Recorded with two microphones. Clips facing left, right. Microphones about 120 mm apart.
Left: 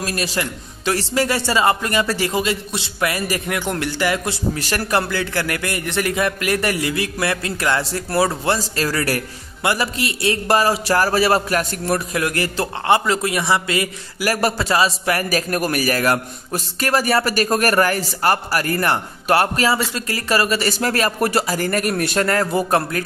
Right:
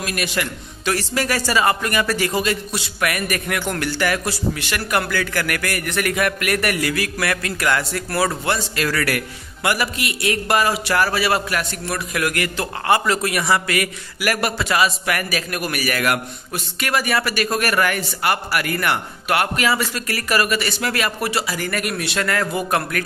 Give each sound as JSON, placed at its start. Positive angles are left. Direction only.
{"t": 0.0, "sound": "a man's voice", "side_deg": 30}
{"t": 4.6, "sound": "a man's voice", "side_deg": 40}
{"t": 5.0, "sound": "a man's voice", "side_deg": 25}
{"t": 12.2, "sound": "a man's voice", "side_deg": 30}